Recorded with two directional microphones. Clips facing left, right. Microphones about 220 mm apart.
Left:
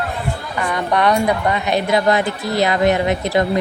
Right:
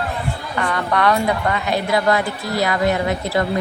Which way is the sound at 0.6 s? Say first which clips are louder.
Left 1 dB; 15° left (ahead or behind).